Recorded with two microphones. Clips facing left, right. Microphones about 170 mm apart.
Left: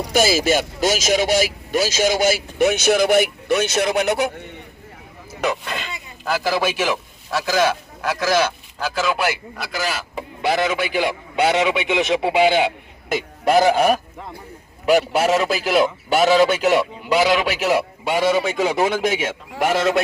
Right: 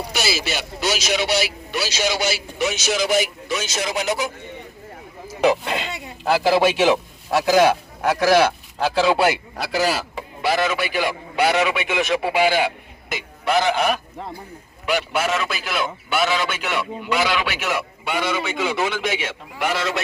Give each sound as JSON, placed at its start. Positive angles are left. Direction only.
{"t": 0.1, "sound": "speech", "side_deg": 45}
{"t": 5.4, "sound": "a man's voice", "side_deg": -30}
{"t": 8.8, "sound": "a man's voice", "side_deg": -30}
{"t": 10.4, "sound": "a man's voice", "side_deg": 20}
{"t": 13.1, "sound": "a man's voice", "side_deg": 45}